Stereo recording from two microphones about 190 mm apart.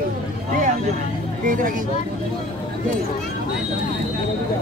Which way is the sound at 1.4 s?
45° right (ahead or behind).